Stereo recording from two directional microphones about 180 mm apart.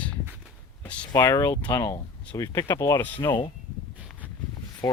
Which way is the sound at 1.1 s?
20° left (ahead or behind).